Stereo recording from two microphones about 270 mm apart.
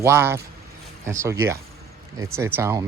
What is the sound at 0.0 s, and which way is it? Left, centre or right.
Speech, centre.